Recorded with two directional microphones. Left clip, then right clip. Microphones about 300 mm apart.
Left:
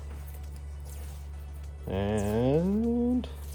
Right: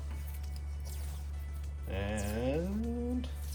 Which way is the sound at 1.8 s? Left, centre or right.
Left.